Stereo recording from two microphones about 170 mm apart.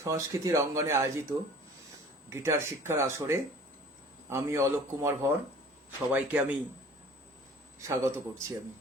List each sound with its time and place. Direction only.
0.0 s speech: 20° right (ahead or behind)
2.3 s speech: 15° right (ahead or behind)
7.8 s speech: 15° right (ahead or behind)